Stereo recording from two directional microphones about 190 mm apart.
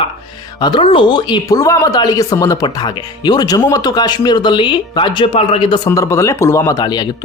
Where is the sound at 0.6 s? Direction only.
25° left (ahead or behind).